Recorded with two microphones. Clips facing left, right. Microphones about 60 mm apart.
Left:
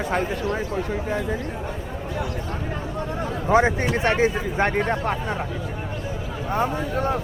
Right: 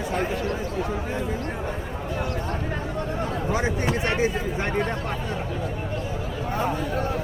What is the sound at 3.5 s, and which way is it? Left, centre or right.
Speech, left.